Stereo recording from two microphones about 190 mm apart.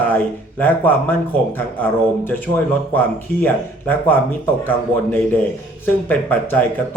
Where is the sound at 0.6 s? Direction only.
10° left (ahead or behind).